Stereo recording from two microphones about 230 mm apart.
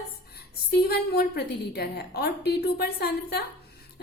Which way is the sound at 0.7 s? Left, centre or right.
Left.